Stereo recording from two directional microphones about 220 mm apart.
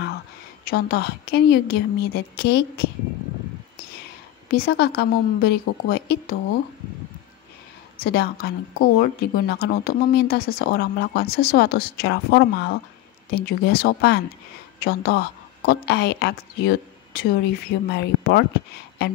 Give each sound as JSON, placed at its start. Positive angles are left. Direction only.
{"t": 0.7, "sound": "speech", "side_deg": 45}
{"t": 4.5, "sound": "speech", "side_deg": 45}
{"t": 8.0, "sound": "speech", "side_deg": 45}